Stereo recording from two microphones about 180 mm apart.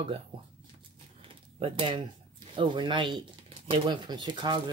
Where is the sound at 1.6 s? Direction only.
30° right (ahead or behind).